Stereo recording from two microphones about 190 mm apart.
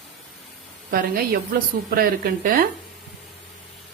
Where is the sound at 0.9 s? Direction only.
50° right (ahead or behind).